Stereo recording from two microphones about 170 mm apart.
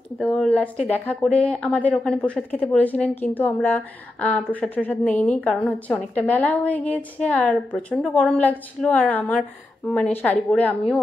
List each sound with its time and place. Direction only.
0.2 s speech: 5° left (ahead or behind)
0.7 s speech: 40° left (ahead or behind)
1.0 s a woman's voice: 10° left (ahead or behind)